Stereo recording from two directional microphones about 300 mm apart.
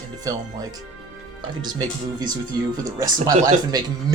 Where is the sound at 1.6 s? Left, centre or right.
Centre.